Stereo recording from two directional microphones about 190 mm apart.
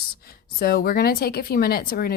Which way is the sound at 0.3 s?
55° left (ahead or behind).